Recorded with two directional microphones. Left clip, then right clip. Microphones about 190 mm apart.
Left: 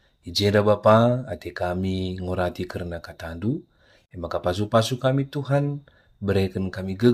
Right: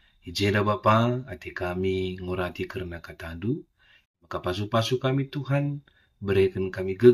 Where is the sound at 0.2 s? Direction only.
50° left (ahead or behind).